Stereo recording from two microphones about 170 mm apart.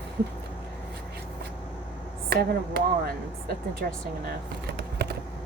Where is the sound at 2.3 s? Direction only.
60° right (ahead or behind).